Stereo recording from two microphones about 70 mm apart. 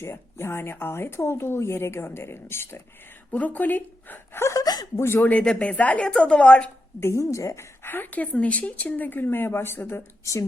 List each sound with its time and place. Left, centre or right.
0.0 s speech: left
3.3 s a woman's voice: left
4.6 s speech: left
4.9 s speech: left
5.3 s speech: centre
7.0 s a woman's voice: left
7.9 s speech: left
8.2 s speech: centre; by 10.0 s left